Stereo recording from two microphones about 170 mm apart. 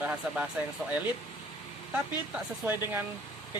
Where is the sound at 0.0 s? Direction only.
10° right (ahead or behind).